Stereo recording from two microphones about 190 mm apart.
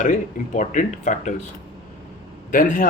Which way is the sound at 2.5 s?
45° left (ahead or behind).